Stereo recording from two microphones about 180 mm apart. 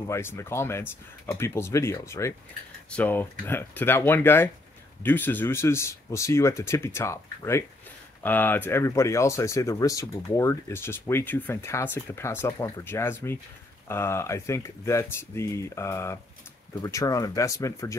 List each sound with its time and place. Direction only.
0.1 s speech: 15° left (ahead or behind)